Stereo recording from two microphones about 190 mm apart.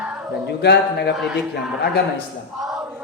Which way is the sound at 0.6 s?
60° left (ahead or behind).